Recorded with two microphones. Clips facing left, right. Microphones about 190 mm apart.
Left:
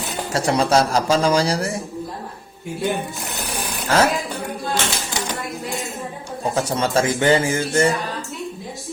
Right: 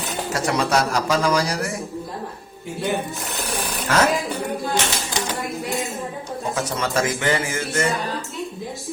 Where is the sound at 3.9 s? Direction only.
30° left (ahead or behind).